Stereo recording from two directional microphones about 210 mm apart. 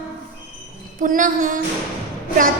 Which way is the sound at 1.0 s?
40° right (ahead or behind).